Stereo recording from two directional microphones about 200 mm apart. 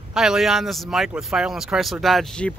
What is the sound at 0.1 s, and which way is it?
Speech, centre (ahead or behind).